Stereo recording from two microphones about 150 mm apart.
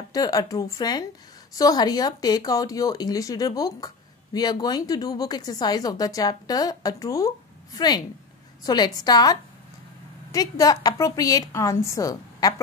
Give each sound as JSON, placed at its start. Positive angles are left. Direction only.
{"t": 0.1, "sound": "speech", "side_deg": 25}